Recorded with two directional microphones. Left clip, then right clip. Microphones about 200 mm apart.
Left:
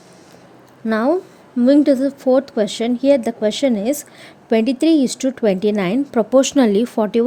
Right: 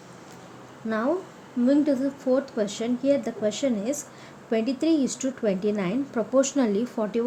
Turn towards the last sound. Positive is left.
turn(degrees=40)  # may be behind; listen again after turning